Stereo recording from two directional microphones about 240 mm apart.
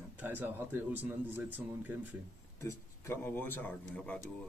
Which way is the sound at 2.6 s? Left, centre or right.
Centre.